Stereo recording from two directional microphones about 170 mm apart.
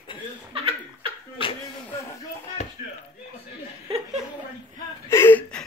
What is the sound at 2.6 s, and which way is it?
Chop, 45° left (ahead or behind).